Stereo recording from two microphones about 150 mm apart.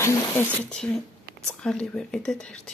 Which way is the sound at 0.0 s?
15° left (ahead or behind).